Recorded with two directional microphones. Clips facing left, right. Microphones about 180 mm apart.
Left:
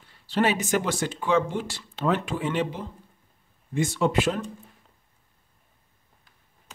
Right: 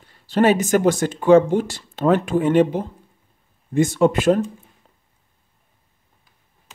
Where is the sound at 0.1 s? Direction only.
45° right (ahead or behind).